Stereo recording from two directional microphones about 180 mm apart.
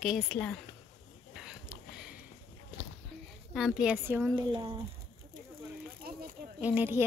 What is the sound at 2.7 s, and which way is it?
Walk, 30° right (ahead or behind).